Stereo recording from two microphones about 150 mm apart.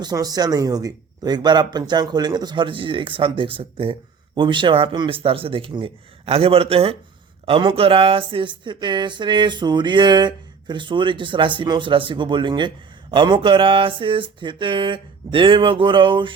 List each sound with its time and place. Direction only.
0.0 s speech: 25° right (ahead or behind)